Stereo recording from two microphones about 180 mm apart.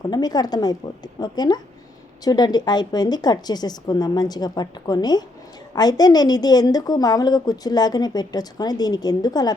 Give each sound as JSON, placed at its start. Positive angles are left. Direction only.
{"t": 0.1, "sound": "a woman's voice", "side_deg": 20}